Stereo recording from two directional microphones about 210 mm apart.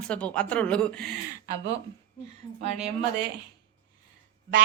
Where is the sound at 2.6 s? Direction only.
30° right (ahead or behind).